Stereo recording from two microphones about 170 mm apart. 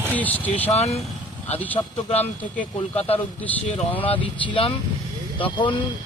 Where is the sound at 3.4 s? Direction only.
10° left (ahead or behind).